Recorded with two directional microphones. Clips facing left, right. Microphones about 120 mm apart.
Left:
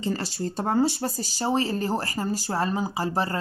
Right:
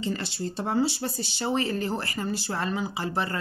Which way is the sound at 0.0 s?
40° left (ahead or behind).